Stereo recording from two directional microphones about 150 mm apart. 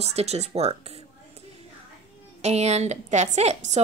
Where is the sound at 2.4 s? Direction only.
45° right (ahead or behind).